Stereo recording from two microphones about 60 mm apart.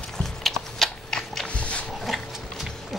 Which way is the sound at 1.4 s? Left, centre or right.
Left.